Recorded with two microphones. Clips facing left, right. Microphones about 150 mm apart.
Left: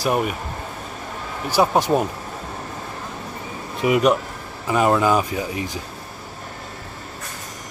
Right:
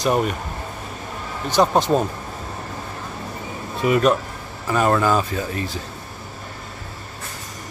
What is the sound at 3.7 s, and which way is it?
Speech, 15° left (ahead or behind).